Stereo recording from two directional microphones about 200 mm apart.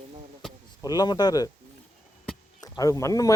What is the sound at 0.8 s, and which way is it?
Speech, 20° left (ahead or behind).